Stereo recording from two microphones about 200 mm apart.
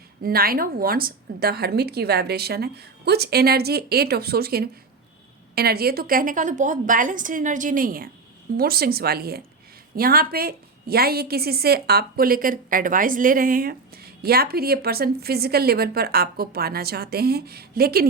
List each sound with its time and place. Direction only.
0.2 s a woman's voice: 50° right (ahead or behind)